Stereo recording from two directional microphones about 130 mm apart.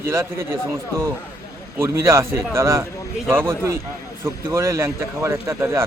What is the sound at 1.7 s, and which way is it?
Speech, 20° right (ahead or behind).